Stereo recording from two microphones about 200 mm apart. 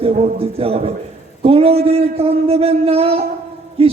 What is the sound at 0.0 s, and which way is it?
A man's voice, 30° right (ahead or behind).